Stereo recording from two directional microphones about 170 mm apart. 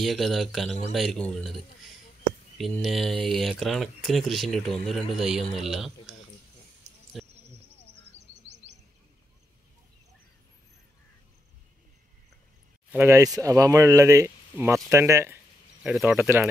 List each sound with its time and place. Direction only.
0.0 s speech: centre (ahead or behind)
2.8 s speech: centre (ahead or behind)
12.9 s speech: 15° right (ahead or behind)
15.8 s speech: 5° right (ahead or behind)